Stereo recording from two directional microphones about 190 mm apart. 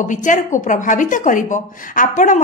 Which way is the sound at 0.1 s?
40° left (ahead or behind).